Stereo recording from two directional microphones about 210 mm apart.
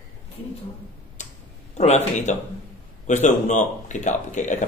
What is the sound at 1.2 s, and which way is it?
Tick-tock, 35° left (ahead or behind).